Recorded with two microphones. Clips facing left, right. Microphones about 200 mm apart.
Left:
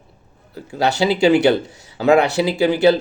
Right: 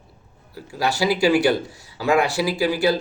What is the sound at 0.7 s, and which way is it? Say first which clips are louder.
Speech: left 4 dB; 25° left (ahead or behind).